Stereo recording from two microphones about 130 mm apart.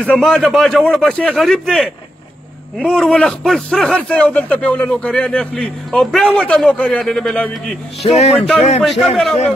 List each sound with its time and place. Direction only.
0.0 s speech: 5° left (ahead or behind)
8.0 s speech: 50° left (ahead or behind)
8.8 s speech: centre (ahead or behind)